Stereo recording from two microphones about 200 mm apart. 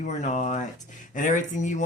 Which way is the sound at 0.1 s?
35° left (ahead or behind).